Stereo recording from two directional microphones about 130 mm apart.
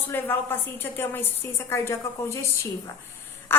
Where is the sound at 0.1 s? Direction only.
15° left (ahead or behind).